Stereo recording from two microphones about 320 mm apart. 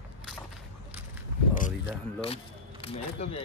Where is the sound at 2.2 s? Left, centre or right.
Centre.